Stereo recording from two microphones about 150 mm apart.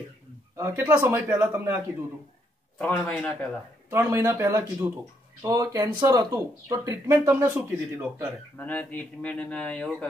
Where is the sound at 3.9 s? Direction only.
15° right (ahead or behind).